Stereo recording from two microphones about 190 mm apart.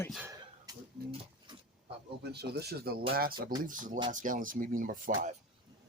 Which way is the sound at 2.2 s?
60° right (ahead or behind).